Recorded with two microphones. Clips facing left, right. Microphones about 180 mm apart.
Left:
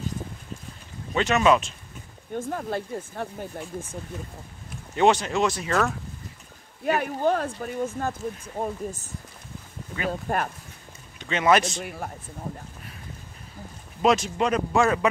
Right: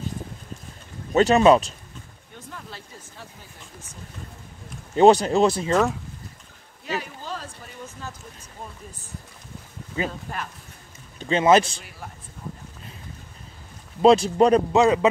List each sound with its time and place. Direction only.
1.1 s speech: 35° right (ahead or behind)
2.3 s speech: 50° left (ahead or behind)
4.9 s speech: 35° right (ahead or behind)
6.8 s speech: 55° left (ahead or behind)
10.3 s speech: 50° left (ahead or behind)
11.1 s speech: 30° right (ahead or behind)
11.8 s speech: 55° left (ahead or behind)
14.0 s speech: 35° right (ahead or behind)
14.7 s a man's voice: 20° right (ahead or behind)